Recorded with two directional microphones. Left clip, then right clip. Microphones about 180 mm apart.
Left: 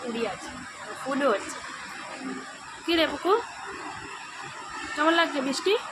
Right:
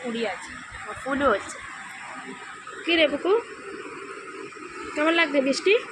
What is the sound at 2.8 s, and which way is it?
Speech, 55° left (ahead or behind).